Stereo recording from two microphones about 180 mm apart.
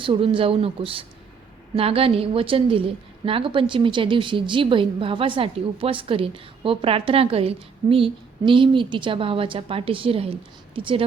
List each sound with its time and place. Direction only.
0.0 s a woman's voice: 30° right (ahead or behind)